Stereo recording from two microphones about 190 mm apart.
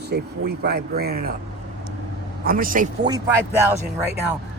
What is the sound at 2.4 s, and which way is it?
Speech, 45° right (ahead or behind).